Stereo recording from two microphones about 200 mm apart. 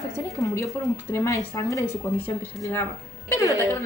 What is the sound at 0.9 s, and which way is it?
Speech, 15° left (ahead or behind).